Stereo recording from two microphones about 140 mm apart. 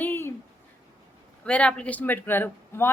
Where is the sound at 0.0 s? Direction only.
15° left (ahead or behind).